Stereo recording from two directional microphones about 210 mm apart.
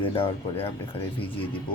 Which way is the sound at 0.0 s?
25° left (ahead or behind).